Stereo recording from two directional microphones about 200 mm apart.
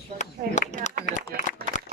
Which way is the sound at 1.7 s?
35° left (ahead or behind).